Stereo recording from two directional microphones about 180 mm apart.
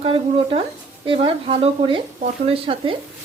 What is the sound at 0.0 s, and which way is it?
Speech, 30° right (ahead or behind).